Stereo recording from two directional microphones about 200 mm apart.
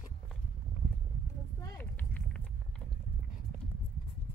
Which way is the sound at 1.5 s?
10° left (ahead or behind).